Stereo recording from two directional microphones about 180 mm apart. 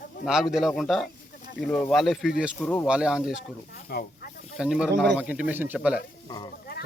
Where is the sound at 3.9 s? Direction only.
55° left (ahead or behind).